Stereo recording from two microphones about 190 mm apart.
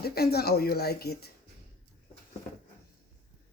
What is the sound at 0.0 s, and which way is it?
Speech, 55° left (ahead or behind).